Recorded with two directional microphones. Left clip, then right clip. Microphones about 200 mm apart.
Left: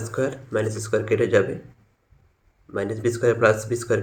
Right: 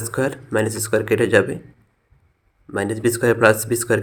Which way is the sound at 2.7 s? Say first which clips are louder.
Right 4 dB; 45° right (ahead or behind).